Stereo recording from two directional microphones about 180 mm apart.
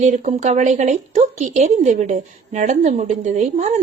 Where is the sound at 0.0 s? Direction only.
40° right (ahead or behind).